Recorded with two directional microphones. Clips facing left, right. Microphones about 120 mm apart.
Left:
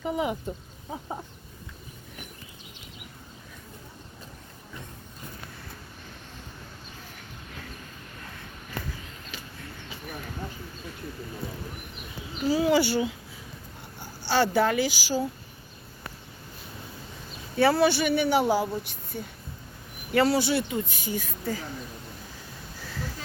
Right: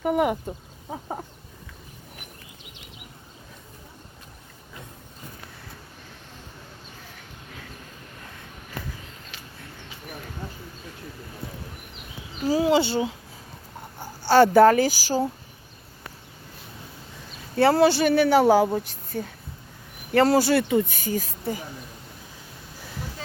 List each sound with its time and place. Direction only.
0.0 s speech: 60° right (ahead or behind)
0.4 s a sound: 30° right (ahead or behind)
12.5 s a sound: 40° right (ahead or behind)
12.7 s speech: 25° right (ahead or behind)
14.0 s a child's voice: 50° right (ahead or behind)
17.6 s a woman's voice: 35° right (ahead or behind)